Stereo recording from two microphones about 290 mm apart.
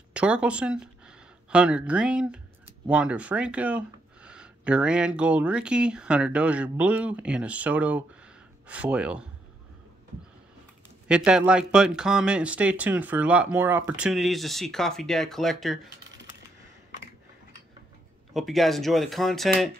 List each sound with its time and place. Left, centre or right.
0.1 s speech: centre
11.1 s speech: centre
18.3 s speech: centre